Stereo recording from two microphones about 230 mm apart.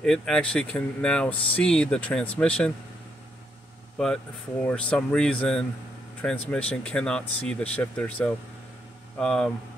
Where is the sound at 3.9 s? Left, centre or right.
Centre.